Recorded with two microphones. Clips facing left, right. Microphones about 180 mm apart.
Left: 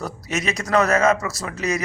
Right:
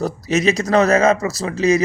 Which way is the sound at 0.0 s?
25° right (ahead or behind).